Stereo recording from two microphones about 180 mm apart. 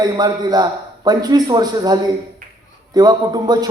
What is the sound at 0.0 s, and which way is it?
A man's voice, 20° right (ahead or behind).